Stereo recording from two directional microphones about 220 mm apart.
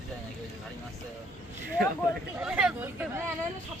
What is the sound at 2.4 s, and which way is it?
Speech, 5° right (ahead or behind).